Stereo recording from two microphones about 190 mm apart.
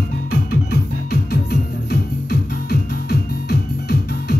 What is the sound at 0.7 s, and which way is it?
Music, 55° left (ahead or behind).